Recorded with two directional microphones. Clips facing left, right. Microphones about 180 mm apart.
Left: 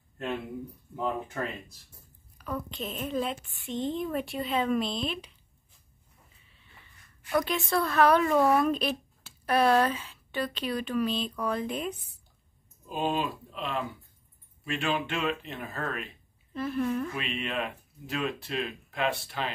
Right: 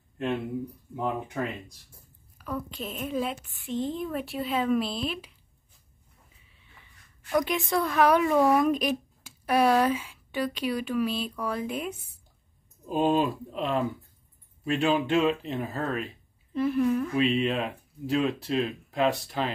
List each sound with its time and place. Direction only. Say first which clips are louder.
0.9 s speech: right 1 dB; 10° right (ahead or behind)
7.2 s speech: right 2 dB; 15° right (ahead or behind)
12.9 s speech: right 6 dB; 40° right (ahead or behind)
16.5 s speech: right 5 dB; 15° right (ahead or behind)
17.1 s speech: right 9 dB; 35° right (ahead or behind)